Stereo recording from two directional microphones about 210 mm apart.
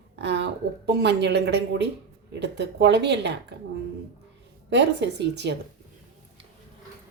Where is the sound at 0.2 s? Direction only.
55° right (ahead or behind).